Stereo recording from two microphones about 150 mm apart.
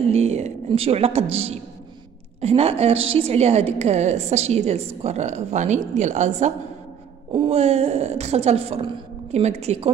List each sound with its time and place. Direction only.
0.1 s a woman's voice: 45° right (ahead or behind)